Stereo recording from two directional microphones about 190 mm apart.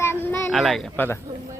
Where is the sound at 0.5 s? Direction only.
Centre (ahead or behind).